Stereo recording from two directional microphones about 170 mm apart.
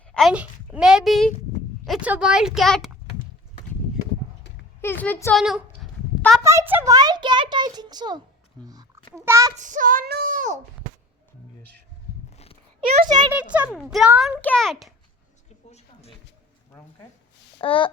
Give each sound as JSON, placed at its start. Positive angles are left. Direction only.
{"t": 0.1, "sound": "a woman's voice", "side_deg": 0}
{"t": 4.8, "sound": "speech", "side_deg": 10}
{"t": 5.4, "sound": "a sound", "side_deg": 0}
{"t": 6.4, "sound": "a child's voice", "side_deg": -15}
{"t": 8.6, "sound": "a sound", "side_deg": -20}
{"t": 9.1, "sound": "a child's voice", "side_deg": -15}
{"t": 9.6, "sound": "child singing", "side_deg": -50}
{"t": 13.1, "sound": "a child's voice", "side_deg": -25}
{"t": 13.3, "sound": "a child's voice", "side_deg": -5}
{"t": 15.4, "sound": "a sound", "side_deg": 40}
{"t": 17.6, "sound": "speech", "side_deg": 30}